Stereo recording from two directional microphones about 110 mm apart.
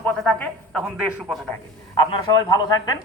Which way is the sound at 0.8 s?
Centre (ahead or behind).